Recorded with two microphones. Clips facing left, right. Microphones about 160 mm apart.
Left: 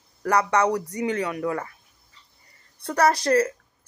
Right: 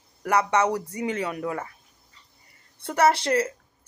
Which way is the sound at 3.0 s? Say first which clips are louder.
Left 1 dB; 25° right (ahead or behind).